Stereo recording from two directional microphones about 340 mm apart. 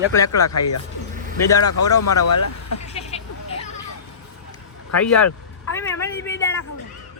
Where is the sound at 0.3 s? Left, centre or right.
Left.